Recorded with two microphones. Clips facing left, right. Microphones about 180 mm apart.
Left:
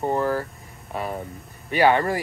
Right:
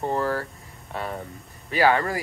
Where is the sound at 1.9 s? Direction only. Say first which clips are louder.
Left 2 dB; 25° left (ahead or behind).